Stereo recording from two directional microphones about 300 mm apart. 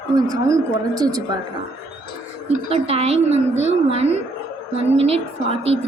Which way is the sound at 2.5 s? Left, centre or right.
Centre.